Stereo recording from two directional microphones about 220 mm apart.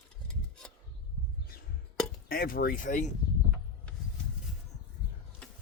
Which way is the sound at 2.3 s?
40° left (ahead or behind).